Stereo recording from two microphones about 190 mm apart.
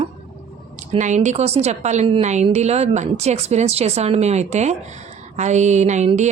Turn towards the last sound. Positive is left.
turn(degrees=-40)  # may be behind; listen again after turning